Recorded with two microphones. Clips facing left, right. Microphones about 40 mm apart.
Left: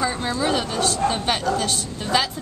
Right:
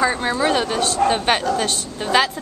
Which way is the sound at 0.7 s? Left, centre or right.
Right.